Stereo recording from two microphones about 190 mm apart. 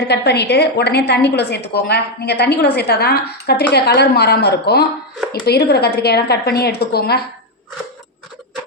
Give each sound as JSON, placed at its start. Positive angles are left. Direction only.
{"t": 0.1, "sound": "a woman's voice", "side_deg": 60}